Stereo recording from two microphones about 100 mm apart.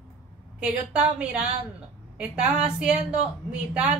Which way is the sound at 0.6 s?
10° right (ahead or behind).